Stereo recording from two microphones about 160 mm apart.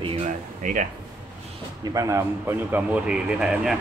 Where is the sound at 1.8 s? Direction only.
20° right (ahead or behind); by 3.8 s 5° right (ahead or behind).